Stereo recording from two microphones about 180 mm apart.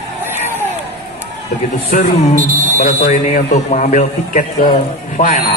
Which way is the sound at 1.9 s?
45° left (ahead or behind).